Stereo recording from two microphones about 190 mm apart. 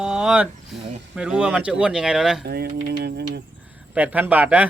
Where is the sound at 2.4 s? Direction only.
55° right (ahead or behind).